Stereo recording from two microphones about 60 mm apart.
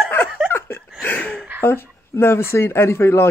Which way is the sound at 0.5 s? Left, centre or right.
Left.